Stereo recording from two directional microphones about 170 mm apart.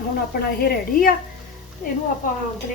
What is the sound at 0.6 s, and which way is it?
Speech, 60° left (ahead or behind).